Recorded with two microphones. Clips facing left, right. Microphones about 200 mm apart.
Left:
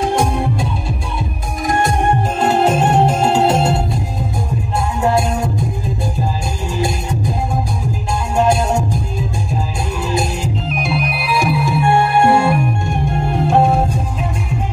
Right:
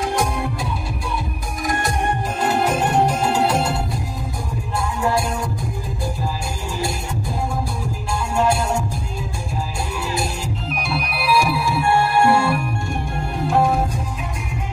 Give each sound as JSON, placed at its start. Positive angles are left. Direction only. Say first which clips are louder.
{"t": 0.0, "sound": "music", "louder": "left 5 dB", "side_deg": 25}
{"t": 1.7, "sound": "music", "louder": "left 6 dB", "side_deg": 25}
{"t": 8.1, "sound": "music", "louder": "left 4 dB", "side_deg": 20}
{"t": 10.1, "sound": "music", "louder": "left 5 dB", "side_deg": 20}